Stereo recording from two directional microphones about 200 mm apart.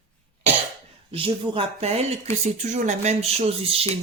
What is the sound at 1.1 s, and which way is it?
Speech, 25° right (ahead or behind).